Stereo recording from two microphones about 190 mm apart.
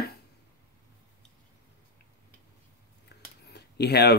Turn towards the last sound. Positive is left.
turn(degrees=60)  # may be behind; listen again after turning